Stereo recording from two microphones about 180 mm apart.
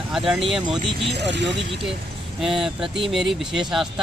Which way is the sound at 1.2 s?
75° right (ahead or behind).